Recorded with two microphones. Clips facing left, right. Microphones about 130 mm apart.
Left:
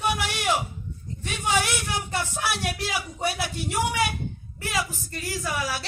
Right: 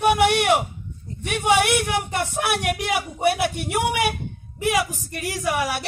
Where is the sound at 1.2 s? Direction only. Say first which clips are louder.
Right 6 dB; 60° right (ahead or behind).